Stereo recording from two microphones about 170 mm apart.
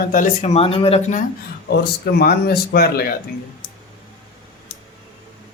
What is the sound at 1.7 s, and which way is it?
Speech, 70° left (ahead or behind).